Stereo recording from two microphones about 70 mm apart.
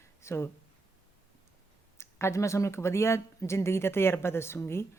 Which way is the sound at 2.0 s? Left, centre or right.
Left.